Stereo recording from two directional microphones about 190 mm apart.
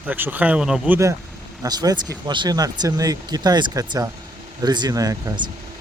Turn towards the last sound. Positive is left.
turn(degrees=-20)  # may be behind; listen again after turning